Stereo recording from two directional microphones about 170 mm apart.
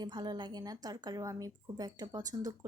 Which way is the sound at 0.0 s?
25° right (ahead or behind).